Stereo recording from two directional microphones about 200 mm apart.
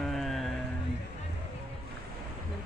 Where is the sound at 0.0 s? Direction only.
Centre (ahead or behind).